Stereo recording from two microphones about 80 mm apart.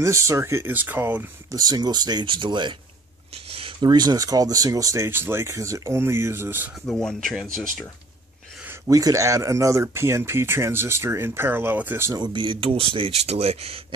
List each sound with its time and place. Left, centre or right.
0.0 s speech: right
0.7 s speech: right
1.5 s speech: right
3.8 s speech: right
6.9 s speech: centre
8.9 s speech: right
12.2 s speech: right